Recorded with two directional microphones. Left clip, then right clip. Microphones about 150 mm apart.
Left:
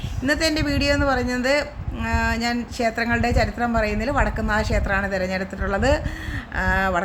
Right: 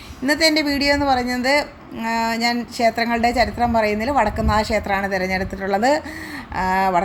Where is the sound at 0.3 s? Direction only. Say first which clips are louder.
Right 4 dB; 10° right (ahead or behind).